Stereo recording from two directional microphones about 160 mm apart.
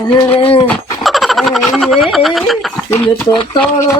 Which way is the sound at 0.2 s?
35° left (ahead or behind).